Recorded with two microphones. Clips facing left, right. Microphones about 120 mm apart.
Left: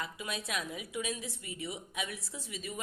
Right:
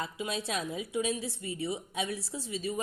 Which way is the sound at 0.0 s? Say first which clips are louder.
Right 5 dB; 30° right (ahead or behind).